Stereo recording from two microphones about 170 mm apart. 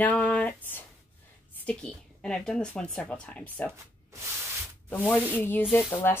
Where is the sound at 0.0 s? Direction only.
5° left (ahead or behind).